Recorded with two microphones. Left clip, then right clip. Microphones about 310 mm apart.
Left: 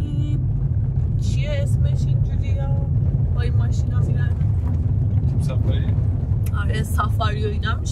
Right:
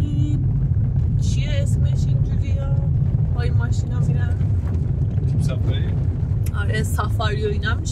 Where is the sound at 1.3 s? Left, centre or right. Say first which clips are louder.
Left 3 dB; centre.